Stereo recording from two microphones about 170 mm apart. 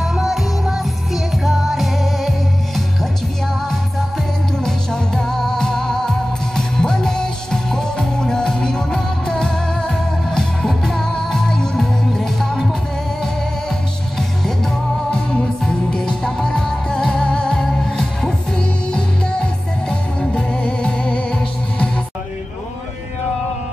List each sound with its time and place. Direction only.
0.0 s music: centre (ahead or behind)
4.6 s music: 5° left (ahead or behind)
14.1 s music: centre (ahead or behind)